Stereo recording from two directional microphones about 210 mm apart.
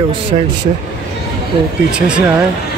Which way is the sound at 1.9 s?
5° right (ahead or behind).